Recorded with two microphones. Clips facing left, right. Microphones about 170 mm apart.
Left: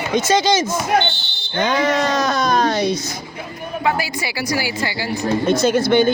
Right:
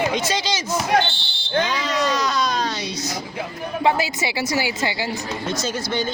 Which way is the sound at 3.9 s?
25° right (ahead or behind).